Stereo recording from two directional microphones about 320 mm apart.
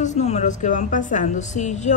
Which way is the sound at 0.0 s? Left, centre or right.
Left.